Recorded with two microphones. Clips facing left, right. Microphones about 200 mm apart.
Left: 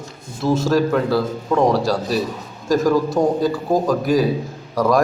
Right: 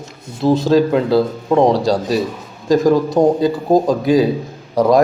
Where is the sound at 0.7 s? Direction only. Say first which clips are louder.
Right 5 dB; 20° right (ahead or behind).